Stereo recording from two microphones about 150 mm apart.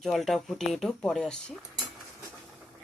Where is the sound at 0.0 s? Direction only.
Centre (ahead or behind).